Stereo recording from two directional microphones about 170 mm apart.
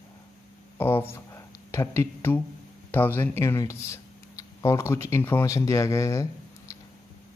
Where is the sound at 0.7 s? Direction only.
15° left (ahead or behind).